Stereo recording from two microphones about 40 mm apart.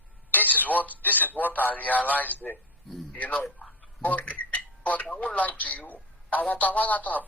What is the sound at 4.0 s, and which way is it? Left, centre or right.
Speech, left.